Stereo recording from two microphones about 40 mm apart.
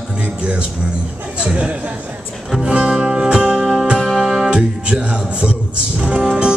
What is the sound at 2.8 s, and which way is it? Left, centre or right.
Music, centre.